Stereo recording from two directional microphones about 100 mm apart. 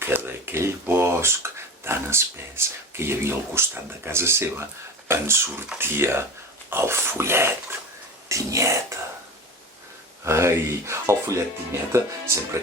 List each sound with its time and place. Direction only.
0.0 s speech: 20° right (ahead or behind)
10.2 s speech: 25° right (ahead or behind)